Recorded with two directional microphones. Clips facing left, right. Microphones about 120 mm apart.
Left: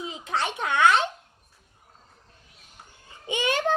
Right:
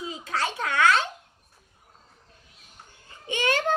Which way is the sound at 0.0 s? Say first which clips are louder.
Left 1 dB; 20° left (ahead or behind).